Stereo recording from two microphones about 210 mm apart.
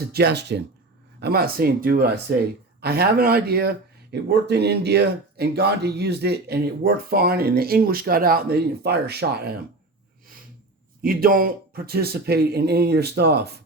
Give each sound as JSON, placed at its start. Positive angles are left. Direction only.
{"t": 0.1, "sound": "speech", "side_deg": -50}
{"t": 11.0, "sound": "speech", "side_deg": -45}